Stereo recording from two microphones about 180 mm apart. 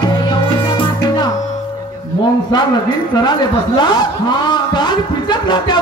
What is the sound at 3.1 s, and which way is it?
A man's voice, 25° left (ahead or behind).